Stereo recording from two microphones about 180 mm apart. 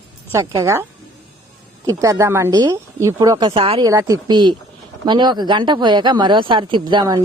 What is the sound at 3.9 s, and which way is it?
Speech, 15° right (ahead or behind).